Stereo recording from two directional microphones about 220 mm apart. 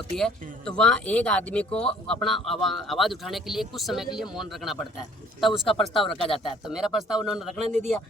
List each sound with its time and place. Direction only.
0.2 s speech: 5° left (ahead or behind)
7.6 s a man's voice: 30° right (ahead or behind)